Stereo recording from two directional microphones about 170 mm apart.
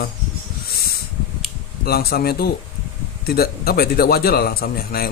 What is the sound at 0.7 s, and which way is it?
Owl, 65° left (ahead or behind).